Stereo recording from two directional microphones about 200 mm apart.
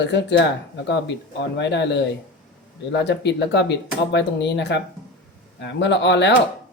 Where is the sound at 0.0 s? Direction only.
60° left (ahead or behind).